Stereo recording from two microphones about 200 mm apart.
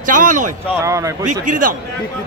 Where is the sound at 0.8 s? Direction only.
15° right (ahead or behind).